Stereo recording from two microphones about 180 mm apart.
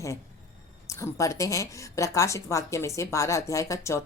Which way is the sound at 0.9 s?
15° left (ahead or behind).